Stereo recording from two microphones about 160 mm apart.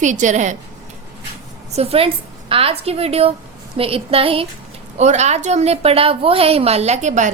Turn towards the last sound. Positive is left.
turn(degrees=-50)  # may be behind; listen again after turning